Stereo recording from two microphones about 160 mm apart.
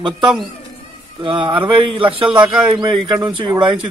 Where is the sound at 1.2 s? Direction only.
30° right (ahead or behind).